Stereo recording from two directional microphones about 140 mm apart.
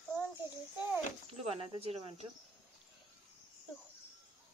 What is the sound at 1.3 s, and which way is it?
Speech, 40° right (ahead or behind).